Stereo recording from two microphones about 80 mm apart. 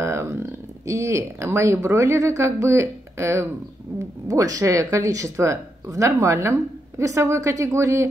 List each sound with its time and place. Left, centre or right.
0.0 s speech: right
3.9 s a sound: right
4.3 s speech: right